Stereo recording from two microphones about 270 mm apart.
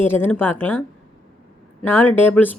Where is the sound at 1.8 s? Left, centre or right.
Centre.